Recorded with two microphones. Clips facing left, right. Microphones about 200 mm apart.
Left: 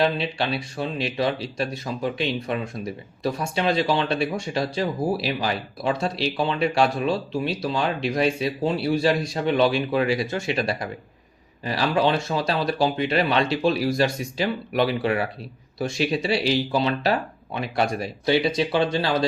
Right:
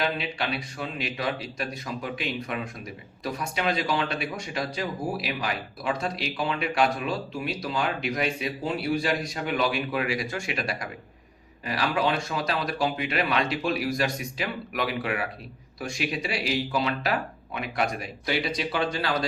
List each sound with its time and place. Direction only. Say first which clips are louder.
0.0 s speech: left 6 dB; 30° left (ahead or behind)